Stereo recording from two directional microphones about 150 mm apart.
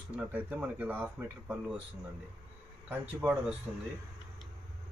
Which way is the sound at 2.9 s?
5° right (ahead or behind).